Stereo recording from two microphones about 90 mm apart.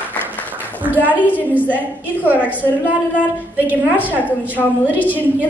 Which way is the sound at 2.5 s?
15° right (ahead or behind).